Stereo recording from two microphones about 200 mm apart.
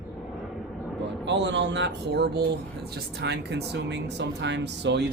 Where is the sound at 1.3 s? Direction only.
60° right (ahead or behind).